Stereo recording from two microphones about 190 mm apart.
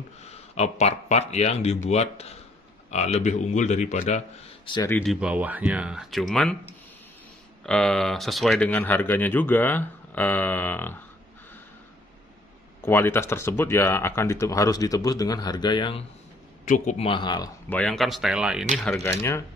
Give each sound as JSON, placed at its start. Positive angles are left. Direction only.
{"t": 0.2, "sound": "speech", "side_deg": 35}
{"t": 4.8, "sound": "speech", "side_deg": 10}
{"t": 5.1, "sound": "speech", "side_deg": -5}
{"t": 12.8, "sound": "speech", "side_deg": 10}
{"t": 16.6, "sound": "speech", "side_deg": 40}
{"t": 17.6, "sound": "speech", "side_deg": 5}